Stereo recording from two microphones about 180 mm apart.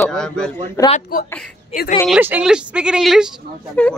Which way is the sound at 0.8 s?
40° left (ahead or behind).